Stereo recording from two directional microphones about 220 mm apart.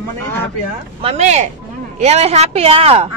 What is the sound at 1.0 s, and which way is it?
Speech, 30° right (ahead or behind).